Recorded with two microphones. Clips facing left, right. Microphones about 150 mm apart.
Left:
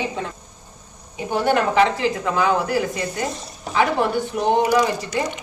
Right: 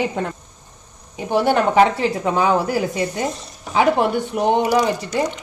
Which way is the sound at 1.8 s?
35° right (ahead or behind).